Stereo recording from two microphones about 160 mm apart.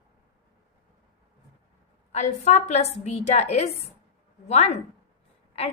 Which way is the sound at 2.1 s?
45° left (ahead or behind).